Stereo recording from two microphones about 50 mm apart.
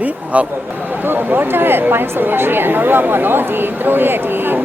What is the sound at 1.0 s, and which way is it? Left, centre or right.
A woman's voice, right.